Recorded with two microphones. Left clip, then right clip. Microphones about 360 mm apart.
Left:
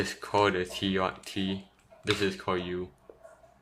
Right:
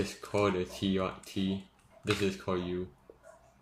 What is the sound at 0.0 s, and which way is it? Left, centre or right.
Speech, left.